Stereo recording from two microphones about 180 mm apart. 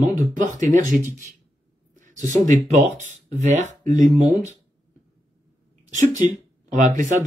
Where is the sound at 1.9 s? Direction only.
45° right (ahead or behind).